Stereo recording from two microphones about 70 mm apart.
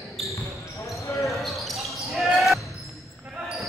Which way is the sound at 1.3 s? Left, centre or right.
Centre.